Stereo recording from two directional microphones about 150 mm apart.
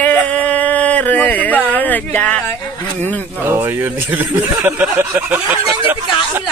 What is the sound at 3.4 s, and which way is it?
Speech, 15° right (ahead or behind).